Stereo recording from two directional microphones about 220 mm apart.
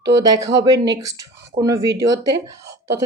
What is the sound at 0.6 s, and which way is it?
A woman's voice, 15° right (ahead or behind).